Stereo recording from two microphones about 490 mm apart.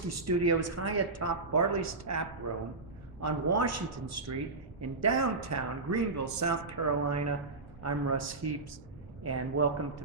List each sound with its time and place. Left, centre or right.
0.1 s speech: right